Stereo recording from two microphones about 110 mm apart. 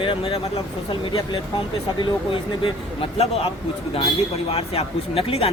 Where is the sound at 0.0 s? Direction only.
55° left (ahead or behind).